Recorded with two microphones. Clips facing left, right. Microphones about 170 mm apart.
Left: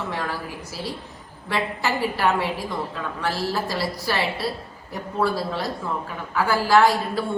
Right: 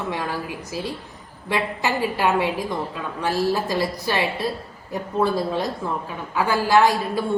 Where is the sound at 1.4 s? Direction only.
15° right (ahead or behind).